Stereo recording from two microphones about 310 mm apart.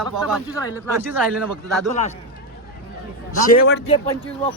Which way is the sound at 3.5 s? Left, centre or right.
Left.